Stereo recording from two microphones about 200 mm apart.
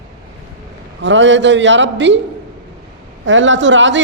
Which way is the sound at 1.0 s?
65° right (ahead or behind).